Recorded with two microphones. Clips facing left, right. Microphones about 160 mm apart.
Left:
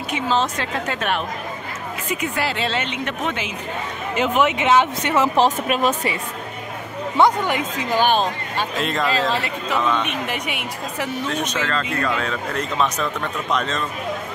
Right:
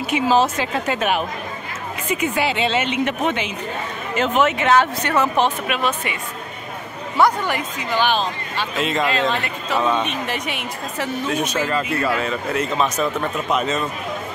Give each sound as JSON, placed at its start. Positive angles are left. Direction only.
{"t": 0.1, "sound": "speech", "side_deg": -5}
{"t": 4.2, "sound": "speech", "side_deg": 15}
{"t": 5.4, "sound": "speech", "side_deg": 40}
{"t": 7.2, "sound": "speech", "side_deg": 20}
{"t": 7.9, "sound": "speech", "side_deg": 45}
{"t": 8.7, "sound": "speech", "side_deg": 0}
{"t": 10.0, "sound": "a woman's voice", "side_deg": 10}
{"t": 11.2, "sound": "speech", "side_deg": -10}